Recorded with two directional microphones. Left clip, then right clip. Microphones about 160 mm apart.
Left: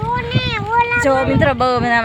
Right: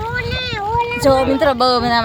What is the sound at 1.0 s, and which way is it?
Speech, 10° right (ahead or behind).